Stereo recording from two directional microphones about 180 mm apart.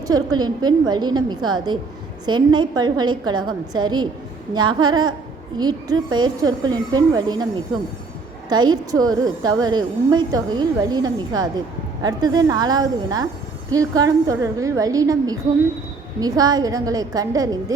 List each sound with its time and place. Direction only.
0.1 s a woman's voice: 20° right (ahead or behind)